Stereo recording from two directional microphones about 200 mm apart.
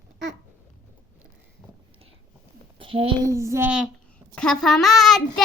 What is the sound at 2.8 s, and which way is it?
Speech, 25° right (ahead or behind).